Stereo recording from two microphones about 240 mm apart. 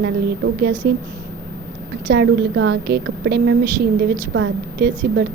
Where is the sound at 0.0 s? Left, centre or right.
Right.